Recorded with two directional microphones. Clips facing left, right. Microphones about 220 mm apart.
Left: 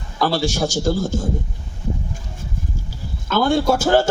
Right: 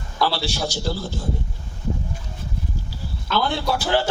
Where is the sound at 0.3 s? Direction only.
45° left (ahead or behind).